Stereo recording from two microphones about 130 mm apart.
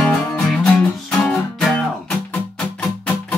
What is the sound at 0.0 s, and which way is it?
Music, 10° left (ahead or behind).